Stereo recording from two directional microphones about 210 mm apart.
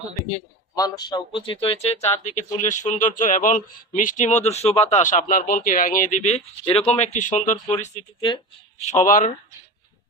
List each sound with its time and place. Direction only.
0.8 s speech: 20° left (ahead or behind); by 9.3 s 35° left (ahead or behind)